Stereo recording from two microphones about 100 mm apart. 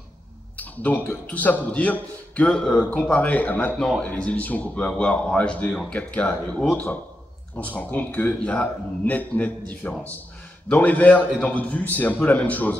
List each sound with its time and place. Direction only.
0.6 s a man's voice: 15° left (ahead or behind)